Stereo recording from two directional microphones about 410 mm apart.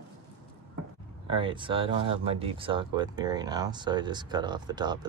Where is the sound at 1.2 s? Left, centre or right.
Centre.